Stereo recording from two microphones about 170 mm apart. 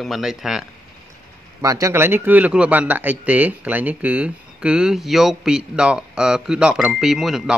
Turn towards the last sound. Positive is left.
turn(degrees=0)  # may be behind; listen again after turning